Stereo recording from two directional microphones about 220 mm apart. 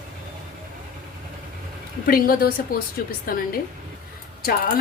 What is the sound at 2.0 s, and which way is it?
A woman's voice, 40° left (ahead or behind).